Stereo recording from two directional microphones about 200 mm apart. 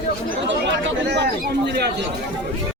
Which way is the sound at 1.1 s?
55° right (ahead or behind).